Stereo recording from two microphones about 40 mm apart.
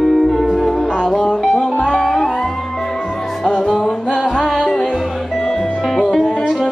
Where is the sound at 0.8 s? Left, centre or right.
Centre.